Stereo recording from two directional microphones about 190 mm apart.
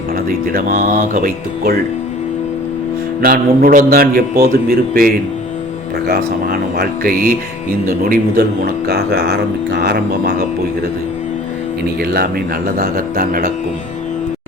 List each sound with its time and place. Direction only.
0.3 s a man's voice: 45° right (ahead or behind)
3.2 s a man's voice: 50° right (ahead or behind)
12.0 s a man's voice: 55° right (ahead or behind)